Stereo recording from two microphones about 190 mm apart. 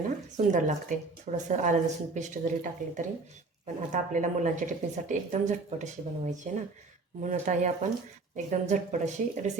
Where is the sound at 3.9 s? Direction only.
40° right (ahead or behind).